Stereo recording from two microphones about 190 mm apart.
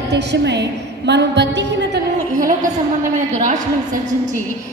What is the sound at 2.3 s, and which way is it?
A woman's voice, 45° right (ahead or behind).